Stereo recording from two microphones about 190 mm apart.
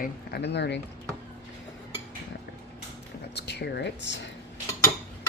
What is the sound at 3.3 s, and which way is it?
Speech, 60° left (ahead or behind).